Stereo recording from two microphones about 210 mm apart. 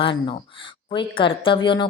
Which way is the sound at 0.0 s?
25° left (ahead or behind).